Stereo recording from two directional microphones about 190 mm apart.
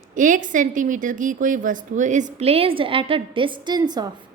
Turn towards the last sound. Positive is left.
turn(degrees=-20)  # may be behind; listen again after turning